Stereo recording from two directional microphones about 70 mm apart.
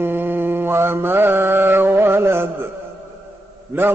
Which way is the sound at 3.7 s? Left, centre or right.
Right.